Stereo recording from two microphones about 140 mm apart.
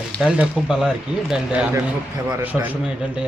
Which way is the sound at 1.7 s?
15° right (ahead or behind).